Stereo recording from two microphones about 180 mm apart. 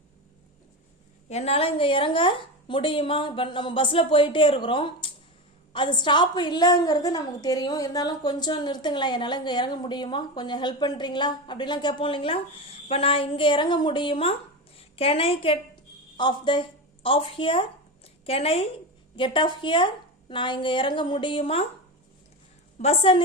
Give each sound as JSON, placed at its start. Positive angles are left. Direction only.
{"t": 1.3, "sound": "a woman's voice", "side_deg": 35}
{"t": 22.8, "sound": "a woman's voice", "side_deg": 35}